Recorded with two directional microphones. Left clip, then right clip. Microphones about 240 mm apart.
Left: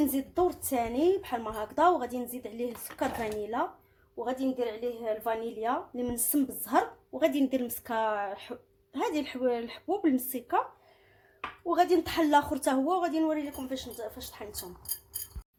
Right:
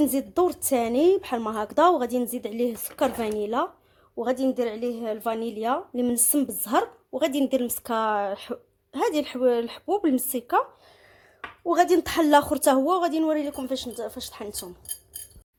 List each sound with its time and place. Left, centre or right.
0.0 s a woman's voice: right
11.7 s a woman's voice: right